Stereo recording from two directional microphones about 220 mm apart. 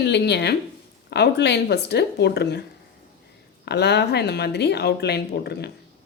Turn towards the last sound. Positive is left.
turn(degrees=50)  # may be behind; listen again after turning